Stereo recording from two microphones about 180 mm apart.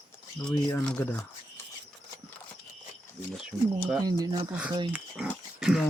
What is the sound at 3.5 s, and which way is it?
Speech, 20° right (ahead or behind).